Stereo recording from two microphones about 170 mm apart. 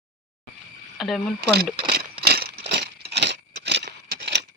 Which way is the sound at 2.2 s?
65° right (ahead or behind).